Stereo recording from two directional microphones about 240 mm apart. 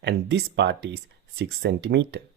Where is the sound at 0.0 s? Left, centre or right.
Right.